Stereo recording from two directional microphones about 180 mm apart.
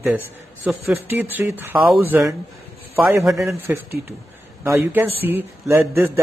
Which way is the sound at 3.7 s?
10° right (ahead or behind).